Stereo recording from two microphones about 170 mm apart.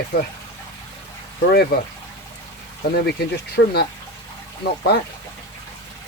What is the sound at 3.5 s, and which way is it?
Speech, 70° left (ahead or behind).